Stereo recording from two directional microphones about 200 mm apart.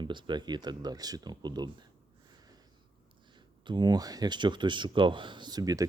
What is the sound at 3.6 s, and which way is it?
Speech, 20° right (ahead or behind).